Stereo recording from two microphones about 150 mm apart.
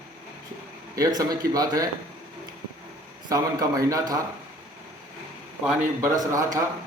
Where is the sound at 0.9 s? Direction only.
25° right (ahead or behind).